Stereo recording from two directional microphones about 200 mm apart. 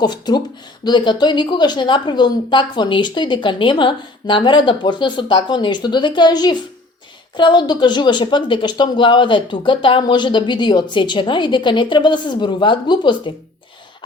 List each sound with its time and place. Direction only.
0.0 s a woman's voice: 20° left (ahead or behind)